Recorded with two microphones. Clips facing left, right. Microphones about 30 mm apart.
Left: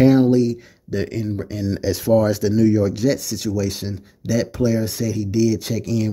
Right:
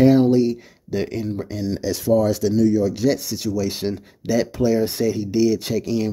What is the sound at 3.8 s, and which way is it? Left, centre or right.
Speech, centre.